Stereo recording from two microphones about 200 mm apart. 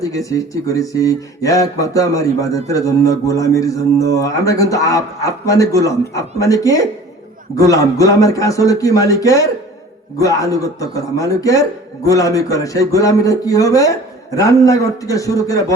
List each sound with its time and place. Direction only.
0.3 s speech: 15° left (ahead or behind)